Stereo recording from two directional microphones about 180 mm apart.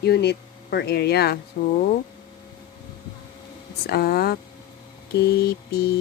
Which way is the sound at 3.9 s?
60° left (ahead or behind).